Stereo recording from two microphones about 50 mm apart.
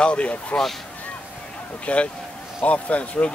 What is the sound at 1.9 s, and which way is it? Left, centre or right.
A man's voice, left.